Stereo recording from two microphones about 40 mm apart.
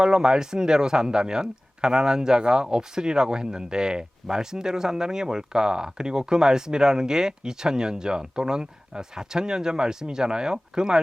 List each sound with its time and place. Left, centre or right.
0.0 s speech: centre